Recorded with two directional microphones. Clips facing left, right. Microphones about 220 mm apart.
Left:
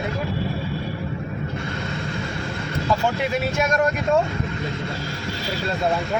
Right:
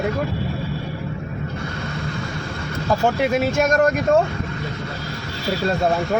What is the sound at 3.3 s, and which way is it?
Speech, 45° right (ahead or behind).